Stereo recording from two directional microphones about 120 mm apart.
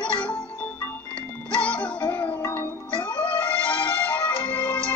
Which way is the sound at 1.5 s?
10° left (ahead or behind).